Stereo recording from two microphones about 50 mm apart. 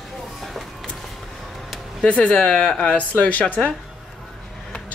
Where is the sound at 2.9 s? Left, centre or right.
Left.